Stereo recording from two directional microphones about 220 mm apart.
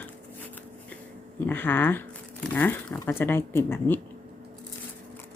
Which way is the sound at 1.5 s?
10° left (ahead or behind).